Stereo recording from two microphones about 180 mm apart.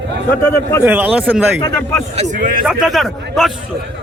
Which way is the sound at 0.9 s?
10° right (ahead or behind).